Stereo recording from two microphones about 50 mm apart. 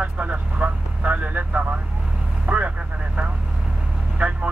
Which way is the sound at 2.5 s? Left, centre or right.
Right.